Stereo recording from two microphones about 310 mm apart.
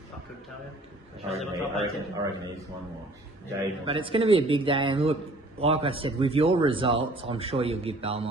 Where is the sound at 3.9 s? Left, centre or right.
Centre.